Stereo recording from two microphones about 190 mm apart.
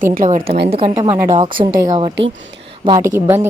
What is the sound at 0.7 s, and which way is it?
A woman's voice, 30° right (ahead or behind).